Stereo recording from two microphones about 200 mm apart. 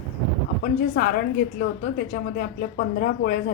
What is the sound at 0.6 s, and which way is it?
Speech, 50° left (ahead or behind).